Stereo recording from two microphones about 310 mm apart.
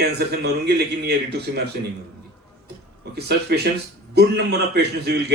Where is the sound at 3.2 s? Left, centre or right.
Right.